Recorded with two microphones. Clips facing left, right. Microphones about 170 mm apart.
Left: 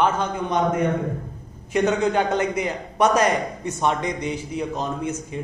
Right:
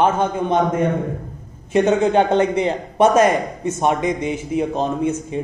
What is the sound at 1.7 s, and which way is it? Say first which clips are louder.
A man's voice: right 5 dB; 25° right (ahead or behind).